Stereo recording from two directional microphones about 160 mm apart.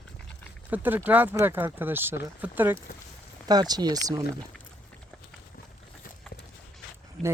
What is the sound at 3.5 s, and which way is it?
Speech, 25° right (ahead or behind).